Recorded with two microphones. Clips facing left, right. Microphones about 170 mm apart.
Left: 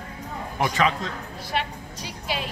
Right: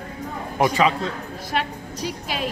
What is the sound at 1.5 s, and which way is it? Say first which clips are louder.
Music: right 2 dB; 45° right (ahead or behind).